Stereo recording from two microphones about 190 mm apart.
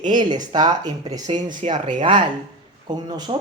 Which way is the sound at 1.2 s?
40° right (ahead or behind).